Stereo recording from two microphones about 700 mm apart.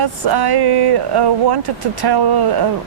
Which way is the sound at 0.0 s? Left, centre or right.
Right.